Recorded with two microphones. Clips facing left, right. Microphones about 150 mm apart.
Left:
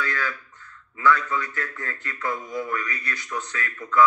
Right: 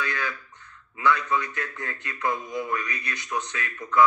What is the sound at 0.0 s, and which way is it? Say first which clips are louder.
A man's voice: left 1 dB; 20° right (ahead or behind).